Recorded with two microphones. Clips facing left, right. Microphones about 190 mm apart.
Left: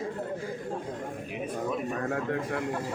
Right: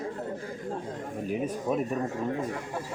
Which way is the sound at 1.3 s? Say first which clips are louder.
Right 4 dB; 40° right (ahead or behind).